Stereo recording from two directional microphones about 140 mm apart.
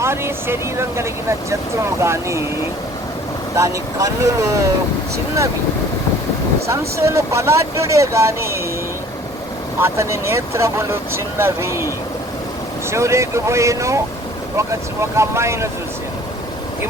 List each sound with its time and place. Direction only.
0.0 s speech: 15° right (ahead or behind)
3.5 s speech: 20° right (ahead or behind)
6.7 s speech: 20° right (ahead or behind)
9.8 s speech: 20° right (ahead or behind)
12.9 s speech: 20° right (ahead or behind)